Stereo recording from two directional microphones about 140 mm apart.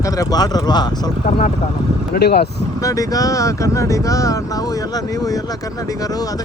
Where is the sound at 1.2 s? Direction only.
50° left (ahead or behind).